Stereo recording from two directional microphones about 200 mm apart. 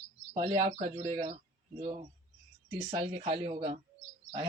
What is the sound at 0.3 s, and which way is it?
A man's voice, 20° right (ahead or behind).